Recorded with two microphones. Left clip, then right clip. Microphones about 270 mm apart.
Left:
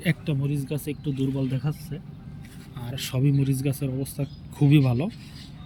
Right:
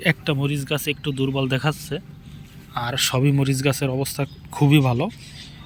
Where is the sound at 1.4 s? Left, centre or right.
Right.